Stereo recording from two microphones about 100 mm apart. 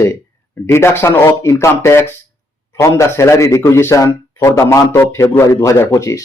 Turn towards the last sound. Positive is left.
turn(degrees=35)  # may be behind; listen again after turning